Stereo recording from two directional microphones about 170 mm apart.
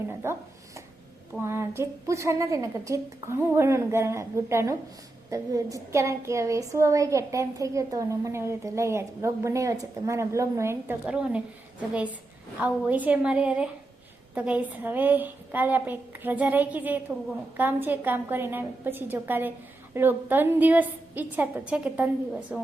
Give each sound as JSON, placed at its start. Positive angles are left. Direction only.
{"t": 0.2, "sound": "a woman's voice", "side_deg": -15}